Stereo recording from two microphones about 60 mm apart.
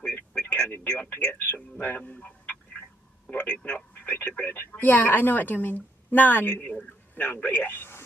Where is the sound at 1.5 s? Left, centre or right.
Left.